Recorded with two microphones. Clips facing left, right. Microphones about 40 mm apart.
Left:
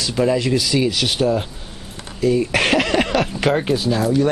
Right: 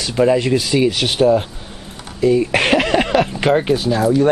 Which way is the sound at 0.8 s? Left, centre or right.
Right.